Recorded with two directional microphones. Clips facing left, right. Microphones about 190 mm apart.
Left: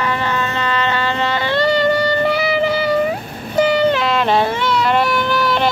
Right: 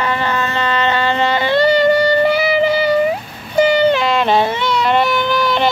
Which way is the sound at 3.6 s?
Centre (ahead or behind).